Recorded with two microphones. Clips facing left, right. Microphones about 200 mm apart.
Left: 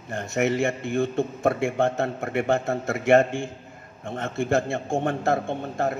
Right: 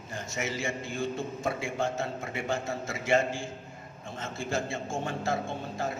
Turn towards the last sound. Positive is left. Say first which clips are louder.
# left 7 dB
turn(degrees=60)  # may be behind; listen again after turning